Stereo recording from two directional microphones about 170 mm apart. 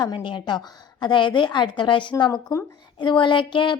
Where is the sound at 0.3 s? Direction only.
25° left (ahead or behind).